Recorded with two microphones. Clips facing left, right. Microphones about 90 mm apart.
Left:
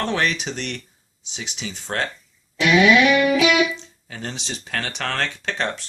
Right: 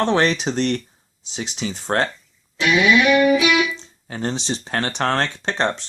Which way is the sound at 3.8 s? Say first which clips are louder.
Right 6 dB; 35° right (ahead or behind).